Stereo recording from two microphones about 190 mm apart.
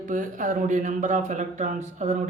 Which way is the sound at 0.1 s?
45° right (ahead or behind).